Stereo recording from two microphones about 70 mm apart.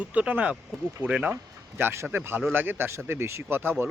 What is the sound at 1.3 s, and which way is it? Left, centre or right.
Speech, right.